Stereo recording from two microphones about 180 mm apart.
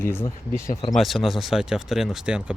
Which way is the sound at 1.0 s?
Centre (ahead or behind).